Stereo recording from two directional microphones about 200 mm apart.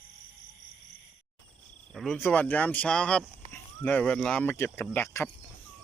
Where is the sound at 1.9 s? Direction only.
5° left (ahead or behind).